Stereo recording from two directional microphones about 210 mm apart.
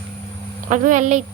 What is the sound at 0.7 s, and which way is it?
Speech, 35° right (ahead or behind).